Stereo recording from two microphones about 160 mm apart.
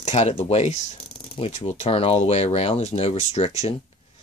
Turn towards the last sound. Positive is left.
turn(degrees=45)  # may be behind; listen again after turning